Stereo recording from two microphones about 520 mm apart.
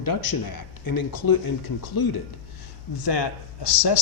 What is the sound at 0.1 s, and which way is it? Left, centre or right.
Speech, left.